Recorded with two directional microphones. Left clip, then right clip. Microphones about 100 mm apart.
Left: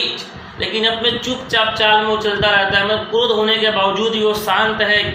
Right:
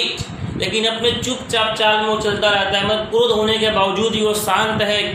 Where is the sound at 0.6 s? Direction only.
50° right (ahead or behind).